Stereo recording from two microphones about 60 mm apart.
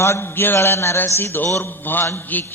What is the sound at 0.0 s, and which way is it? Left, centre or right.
A man's voice, left.